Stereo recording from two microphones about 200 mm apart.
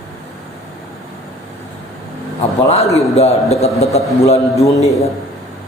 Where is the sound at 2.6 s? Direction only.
35° left (ahead or behind).